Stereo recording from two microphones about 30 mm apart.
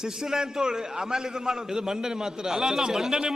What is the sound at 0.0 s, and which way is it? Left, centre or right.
A man's voice, right.